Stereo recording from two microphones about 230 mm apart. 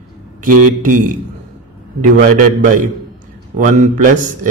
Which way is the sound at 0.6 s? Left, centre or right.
Right.